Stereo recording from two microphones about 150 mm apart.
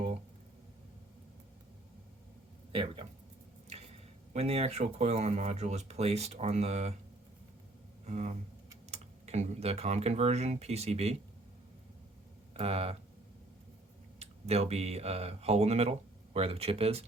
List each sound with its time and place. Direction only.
2.7 s speech: 35° right (ahead or behind)
4.4 s speech: 45° right (ahead or behind)
8.0 s speech: 50° right (ahead or behind)
12.5 s speech: 40° right (ahead or behind)
14.2 s speech: 45° right (ahead or behind)